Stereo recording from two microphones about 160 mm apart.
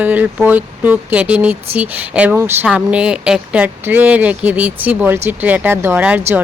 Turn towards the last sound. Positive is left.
turn(degrees=-10)  # may be behind; listen again after turning